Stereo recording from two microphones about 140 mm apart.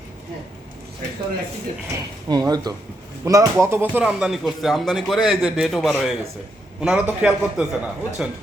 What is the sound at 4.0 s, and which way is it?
A man's voice, 5° right (ahead or behind).